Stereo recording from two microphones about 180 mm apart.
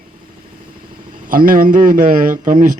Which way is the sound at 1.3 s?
50° right (ahead or behind).